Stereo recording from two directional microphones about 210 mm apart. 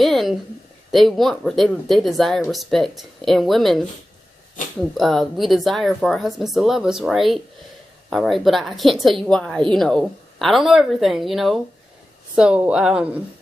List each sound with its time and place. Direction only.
0.0 s a sound: centre (ahead or behind)
0.9 s speech: centre (ahead or behind)
4.9 s speech: centre (ahead or behind)